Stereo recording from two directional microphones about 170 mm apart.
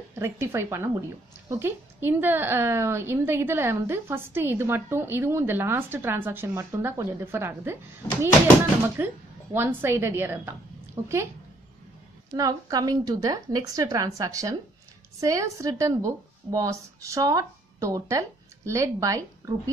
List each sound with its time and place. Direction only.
0.1 s a woman's voice: 15° right (ahead or behind)
8.9 s a woman's voice: 10° right (ahead or behind)
12.4 s a woman's voice: 20° right (ahead or behind)